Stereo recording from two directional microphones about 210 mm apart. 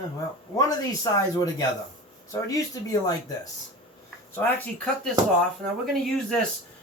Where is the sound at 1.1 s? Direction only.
15° left (ahead or behind).